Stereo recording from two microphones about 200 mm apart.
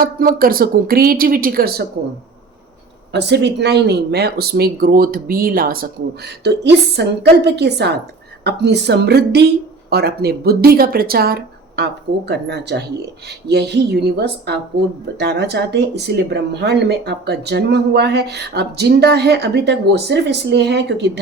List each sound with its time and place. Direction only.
0.0 s speech: 45° right (ahead or behind)
3.1 s speech: 60° right (ahead or behind)